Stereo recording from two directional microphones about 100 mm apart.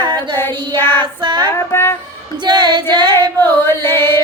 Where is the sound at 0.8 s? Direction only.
50° right (ahead or behind).